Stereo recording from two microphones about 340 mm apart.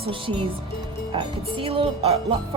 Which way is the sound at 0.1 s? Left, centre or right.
Centre.